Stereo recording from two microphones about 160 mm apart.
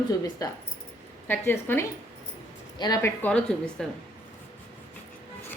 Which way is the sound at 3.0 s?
10° left (ahead or behind).